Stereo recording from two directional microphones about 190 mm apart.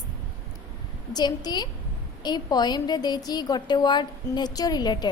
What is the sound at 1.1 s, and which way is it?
A woman's voice, 20° left (ahead or behind).